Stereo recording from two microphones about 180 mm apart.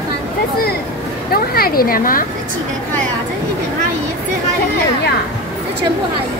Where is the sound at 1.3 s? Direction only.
55° left (ahead or behind).